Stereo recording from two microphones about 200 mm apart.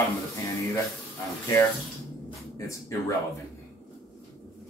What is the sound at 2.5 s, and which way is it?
Speech, 15° left (ahead or behind).